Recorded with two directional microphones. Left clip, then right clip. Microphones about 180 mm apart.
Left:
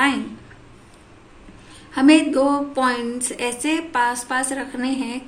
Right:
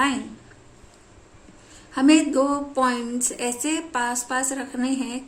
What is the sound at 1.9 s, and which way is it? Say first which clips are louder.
Speech: left 3 dB; 40° right (ahead or behind).